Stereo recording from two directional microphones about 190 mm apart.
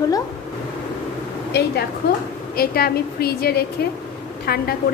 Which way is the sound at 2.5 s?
55° left (ahead or behind).